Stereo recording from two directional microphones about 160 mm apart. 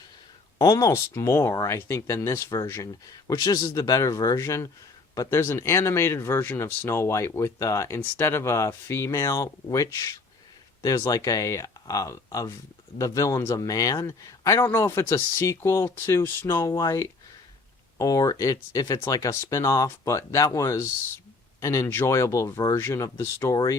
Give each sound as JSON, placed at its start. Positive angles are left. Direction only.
{"t": 0.6, "sound": "speech", "side_deg": 20}